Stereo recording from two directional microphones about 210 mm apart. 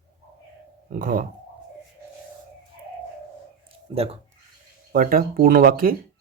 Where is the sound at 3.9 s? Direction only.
30° right (ahead or behind).